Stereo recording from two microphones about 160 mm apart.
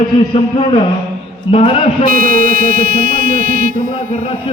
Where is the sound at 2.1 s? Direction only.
65° right (ahead or behind).